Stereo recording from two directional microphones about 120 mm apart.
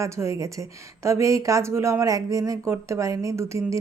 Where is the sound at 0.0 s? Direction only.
25° right (ahead or behind).